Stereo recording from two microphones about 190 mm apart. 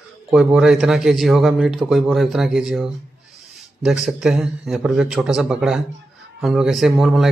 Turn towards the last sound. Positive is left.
turn(degrees=0)  # may be behind; listen again after turning